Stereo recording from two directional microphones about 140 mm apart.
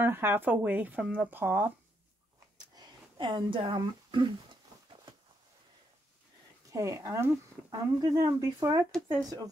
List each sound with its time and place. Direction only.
0.0 s speech: 15° right (ahead or behind)
2.5 s a sound: 30° right (ahead or behind)
6.7 s speech: 25° right (ahead or behind)
7.7 s speech: 30° right (ahead or behind)